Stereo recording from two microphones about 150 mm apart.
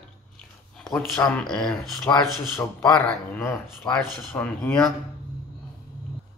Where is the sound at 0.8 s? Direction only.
5° left (ahead or behind).